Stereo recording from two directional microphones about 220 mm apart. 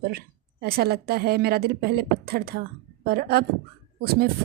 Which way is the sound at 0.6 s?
45° right (ahead or behind).